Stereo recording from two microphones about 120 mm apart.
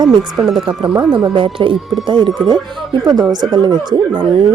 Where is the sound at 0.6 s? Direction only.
40° right (ahead or behind).